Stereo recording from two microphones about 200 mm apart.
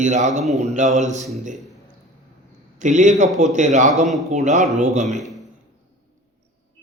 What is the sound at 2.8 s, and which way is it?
A man's voice, 40° right (ahead or behind).